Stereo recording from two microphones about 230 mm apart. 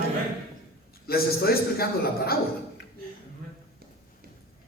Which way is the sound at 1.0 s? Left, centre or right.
Left.